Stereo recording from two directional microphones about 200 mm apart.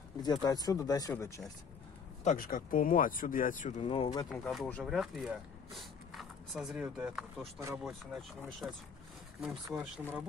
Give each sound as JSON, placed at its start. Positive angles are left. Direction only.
{"t": 0.2, "sound": "speech", "side_deg": 20}
{"t": 2.2, "sound": "speech", "side_deg": 45}
{"t": 3.8, "sound": "speech", "side_deg": 25}
{"t": 4.3, "sound": "speech", "side_deg": 0}
{"t": 9.7, "sound": "speech", "side_deg": -10}